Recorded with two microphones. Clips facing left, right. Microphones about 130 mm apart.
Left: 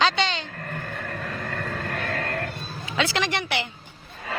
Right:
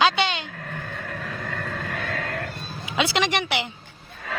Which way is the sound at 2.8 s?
15° right (ahead or behind).